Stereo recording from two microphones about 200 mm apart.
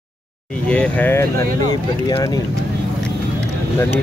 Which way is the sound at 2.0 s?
20° left (ahead or behind).